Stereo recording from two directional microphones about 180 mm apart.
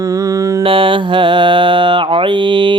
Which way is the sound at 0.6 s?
30° right (ahead or behind).